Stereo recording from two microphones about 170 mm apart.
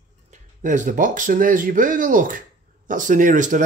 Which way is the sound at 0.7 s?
50° right (ahead or behind).